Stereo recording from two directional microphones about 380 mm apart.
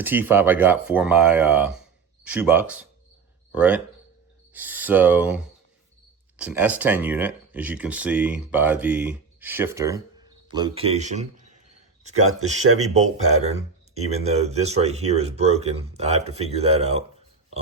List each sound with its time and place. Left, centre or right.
0.0 s speech: centre
12.0 s speech: right
13.1 s speech: centre